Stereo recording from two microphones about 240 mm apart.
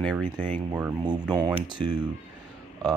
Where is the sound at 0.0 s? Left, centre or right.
Centre.